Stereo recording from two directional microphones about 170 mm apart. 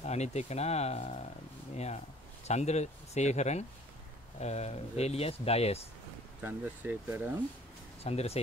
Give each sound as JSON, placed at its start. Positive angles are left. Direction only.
{"t": 0.0, "sound": "speech", "side_deg": 40}
{"t": 2.4, "sound": "speech", "side_deg": 40}
{"t": 6.4, "sound": "speech", "side_deg": -10}
{"t": 8.0, "sound": "speech", "side_deg": 35}